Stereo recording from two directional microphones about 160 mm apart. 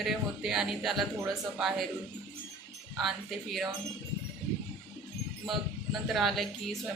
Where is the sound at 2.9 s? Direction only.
Centre (ahead or behind).